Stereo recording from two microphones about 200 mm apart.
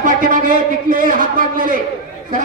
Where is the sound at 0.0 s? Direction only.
40° right (ahead or behind).